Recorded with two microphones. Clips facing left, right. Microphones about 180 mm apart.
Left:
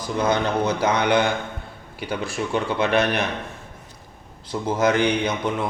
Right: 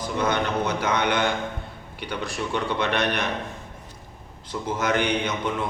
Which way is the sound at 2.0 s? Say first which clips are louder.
Left 3 dB; 5° left (ahead or behind).